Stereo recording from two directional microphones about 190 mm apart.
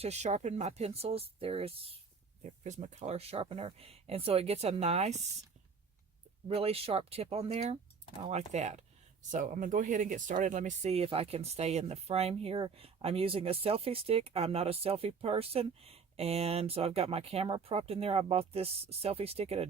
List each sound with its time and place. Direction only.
0.0 s speech: 35° right (ahead or behind)
6.5 s speech: 30° right (ahead or behind)